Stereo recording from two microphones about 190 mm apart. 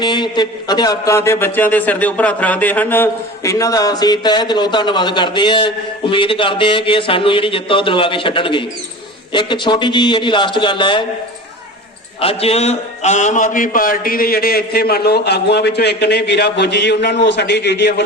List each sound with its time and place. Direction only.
0.0 s a man's voice: 20° left (ahead or behind)
12.2 s a man's voice: 30° left (ahead or behind); by 18.0 s 65° left (ahead or behind)